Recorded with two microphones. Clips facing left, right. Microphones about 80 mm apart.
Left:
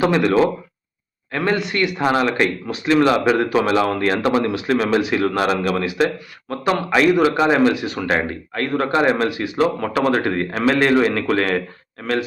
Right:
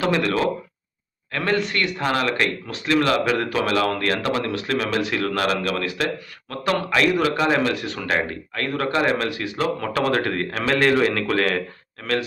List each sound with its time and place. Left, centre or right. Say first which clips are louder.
0.0 s a man's voice: left 5 dB; centre
9.3 s a man's voice: left 5 dB; centre